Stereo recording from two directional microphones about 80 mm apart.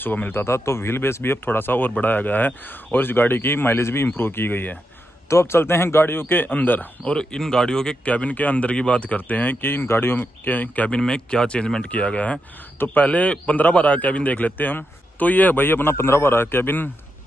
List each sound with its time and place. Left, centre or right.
0.0 s speech: left
7.2 s speech: centre
12.7 s speech: left